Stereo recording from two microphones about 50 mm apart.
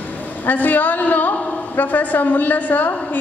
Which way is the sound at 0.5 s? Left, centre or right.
Left.